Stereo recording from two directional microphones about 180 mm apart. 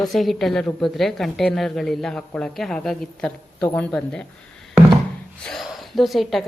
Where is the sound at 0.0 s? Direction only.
Centre (ahead or behind).